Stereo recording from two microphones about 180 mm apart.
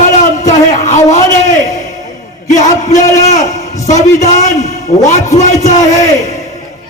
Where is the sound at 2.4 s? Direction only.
45° left (ahead or behind).